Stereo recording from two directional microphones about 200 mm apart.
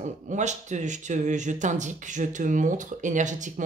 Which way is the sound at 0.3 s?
35° right (ahead or behind).